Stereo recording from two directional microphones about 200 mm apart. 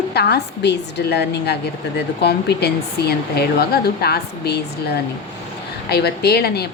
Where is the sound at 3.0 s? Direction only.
55° left (ahead or behind).